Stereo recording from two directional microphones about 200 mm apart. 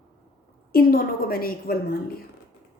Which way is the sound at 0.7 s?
50° left (ahead or behind).